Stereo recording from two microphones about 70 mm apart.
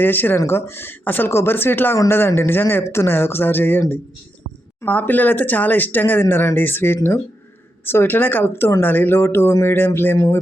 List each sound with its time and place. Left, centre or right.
0.0 s speech: left